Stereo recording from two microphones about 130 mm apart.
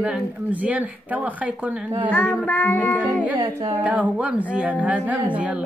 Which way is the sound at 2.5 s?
15° left (ahead or behind).